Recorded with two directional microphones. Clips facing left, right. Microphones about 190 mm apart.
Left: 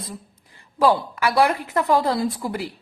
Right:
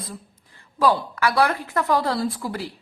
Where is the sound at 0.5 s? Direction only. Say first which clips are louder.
Left 2 dB; 15° left (ahead or behind).